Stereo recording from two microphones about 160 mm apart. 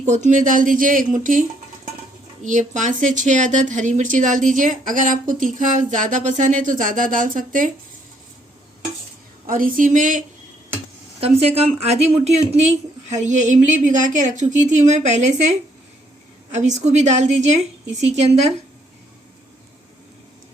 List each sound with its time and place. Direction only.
0.0 s speech: 50° right (ahead or behind)
9.5 s speech: 60° right (ahead or behind)
11.2 s speech: 40° right (ahead or behind)
16.5 s speech: 45° right (ahead or behind)